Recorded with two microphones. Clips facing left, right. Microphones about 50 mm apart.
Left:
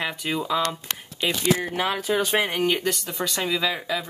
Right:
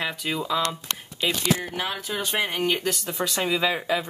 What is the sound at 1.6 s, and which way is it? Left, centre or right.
Speech, left.